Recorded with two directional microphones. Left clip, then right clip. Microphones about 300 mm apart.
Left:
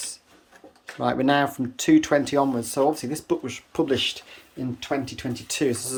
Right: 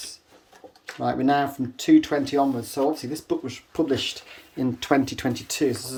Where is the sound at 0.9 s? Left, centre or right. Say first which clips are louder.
Left 1 dB; centre.